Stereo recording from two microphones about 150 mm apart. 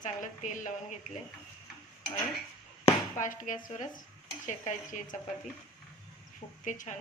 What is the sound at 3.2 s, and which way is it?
A woman's voice, 55° left (ahead or behind).